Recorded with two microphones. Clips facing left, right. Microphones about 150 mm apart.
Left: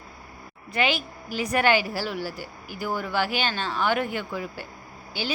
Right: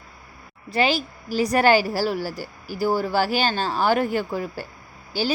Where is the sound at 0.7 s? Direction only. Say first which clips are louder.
Right 4 dB; 35° right (ahead or behind).